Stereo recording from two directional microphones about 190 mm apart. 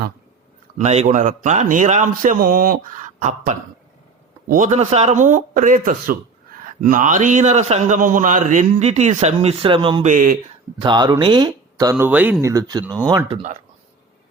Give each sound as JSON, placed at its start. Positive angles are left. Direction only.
{"t": 0.8, "sound": "a man's voice", "side_deg": -35}
{"t": 10.1, "sound": "speech", "side_deg": -45}
{"t": 10.8, "sound": "speech", "side_deg": -25}